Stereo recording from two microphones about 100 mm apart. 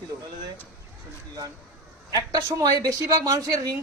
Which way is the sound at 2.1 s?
35° right (ahead or behind).